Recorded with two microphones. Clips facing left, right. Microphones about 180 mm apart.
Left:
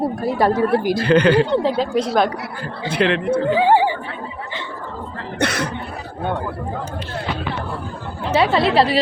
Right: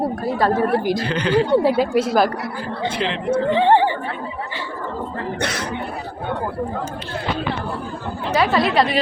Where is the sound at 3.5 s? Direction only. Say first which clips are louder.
Even; 5° left (ahead or behind).